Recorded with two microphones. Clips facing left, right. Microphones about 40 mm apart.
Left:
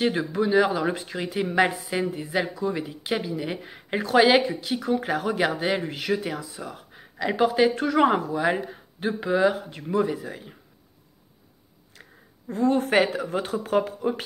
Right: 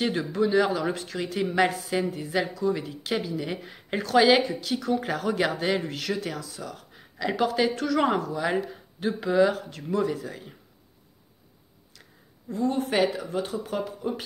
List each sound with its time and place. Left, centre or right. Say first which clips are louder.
0.0 s a woman's voice: left 1 dB; centre; by 8.5 s left
8.5 s speech: left 2 dB; centre
11.9 s speech: left 5 dB; left